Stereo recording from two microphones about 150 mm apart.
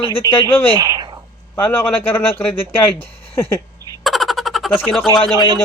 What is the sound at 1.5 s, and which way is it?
Speech, 15° left (ahead or behind).